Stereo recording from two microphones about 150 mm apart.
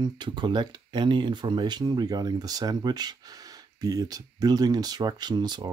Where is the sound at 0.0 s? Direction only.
30° right (ahead or behind).